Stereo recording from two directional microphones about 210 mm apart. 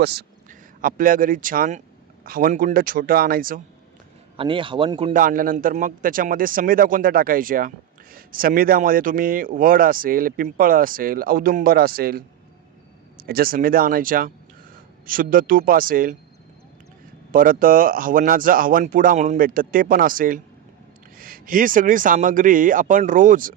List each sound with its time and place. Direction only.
0.0 s a man's voice: 50° right (ahead or behind)
4.4 s speech: 25° right (ahead or behind)
5.1 s a man's voice: 40° right (ahead or behind)
17.3 s speech: 40° right (ahead or behind)